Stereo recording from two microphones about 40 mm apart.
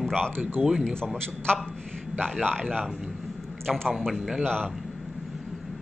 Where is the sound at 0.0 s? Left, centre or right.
Centre.